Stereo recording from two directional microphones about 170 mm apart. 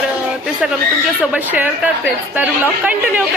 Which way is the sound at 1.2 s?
10° right (ahead or behind).